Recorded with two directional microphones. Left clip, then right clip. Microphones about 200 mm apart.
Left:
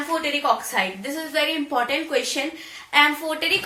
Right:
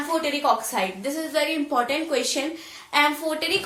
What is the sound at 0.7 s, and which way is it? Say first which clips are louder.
A woman's voice: left 1 dB; 25° right (ahead or behind).